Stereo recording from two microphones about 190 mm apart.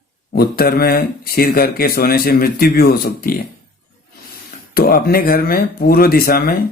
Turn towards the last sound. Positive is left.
turn(degrees=55)  # may be behind; listen again after turning